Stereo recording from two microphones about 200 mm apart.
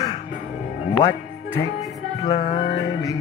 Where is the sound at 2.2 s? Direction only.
30° left (ahead or behind).